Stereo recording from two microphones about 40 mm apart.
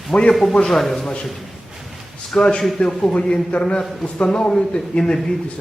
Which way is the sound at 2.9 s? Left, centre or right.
Centre.